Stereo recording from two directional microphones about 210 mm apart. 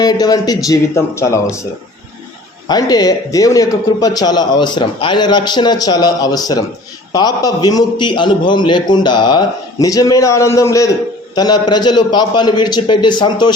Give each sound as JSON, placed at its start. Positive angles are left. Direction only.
{"t": 0.0, "sound": "a man's voice", "side_deg": 20}
{"t": 2.6, "sound": "a man's voice", "side_deg": 20}